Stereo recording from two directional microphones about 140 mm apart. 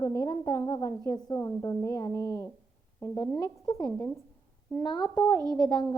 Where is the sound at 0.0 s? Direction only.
25° left (ahead or behind).